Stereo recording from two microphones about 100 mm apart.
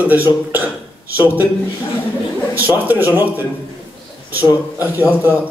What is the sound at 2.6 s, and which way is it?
Speech, 20° right (ahead or behind).